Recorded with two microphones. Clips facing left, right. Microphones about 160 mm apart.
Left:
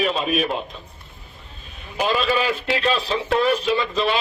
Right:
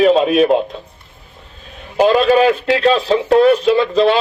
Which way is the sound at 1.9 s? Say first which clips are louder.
Right 10 dB; 40° right (ahead or behind).